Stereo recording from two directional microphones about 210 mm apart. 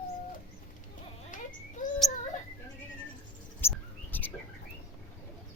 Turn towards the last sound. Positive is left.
turn(degrees=10)  # may be behind; listen again after turning